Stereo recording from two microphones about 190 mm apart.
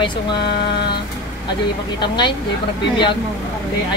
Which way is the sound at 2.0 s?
25° left (ahead or behind).